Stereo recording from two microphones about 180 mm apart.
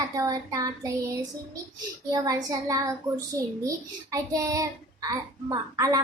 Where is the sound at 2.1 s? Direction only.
20° right (ahead or behind).